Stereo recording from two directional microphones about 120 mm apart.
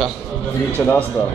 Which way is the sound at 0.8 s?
25° left (ahead or behind).